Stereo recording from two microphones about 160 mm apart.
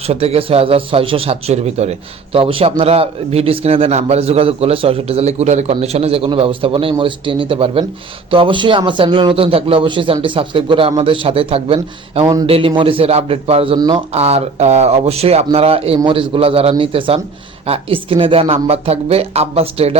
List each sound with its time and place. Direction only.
0.1 s speech: 40° right (ahead or behind)
12.2 s speech: 25° right (ahead or behind)
12.5 s speech: 35° right (ahead or behind)
13.7 s speech: 25° right (ahead or behind)
14.1 s speech: 40° right (ahead or behind)